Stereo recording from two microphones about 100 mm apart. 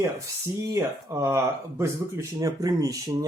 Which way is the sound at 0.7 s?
35° right (ahead or behind).